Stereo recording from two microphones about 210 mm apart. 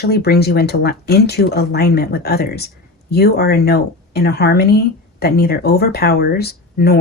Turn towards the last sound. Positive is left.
turn(degrees=50)  # may be behind; listen again after turning